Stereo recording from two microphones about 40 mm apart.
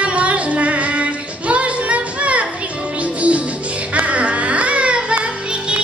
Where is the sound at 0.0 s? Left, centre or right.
Right.